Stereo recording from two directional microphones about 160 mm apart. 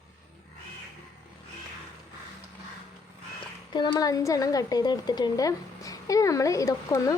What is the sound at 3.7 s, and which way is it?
A woman's voice, 25° left (ahead or behind).